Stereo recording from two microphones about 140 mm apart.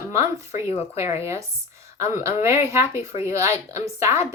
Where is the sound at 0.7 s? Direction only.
50° left (ahead or behind).